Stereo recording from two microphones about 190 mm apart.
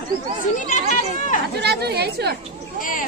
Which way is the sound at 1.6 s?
60° right (ahead or behind).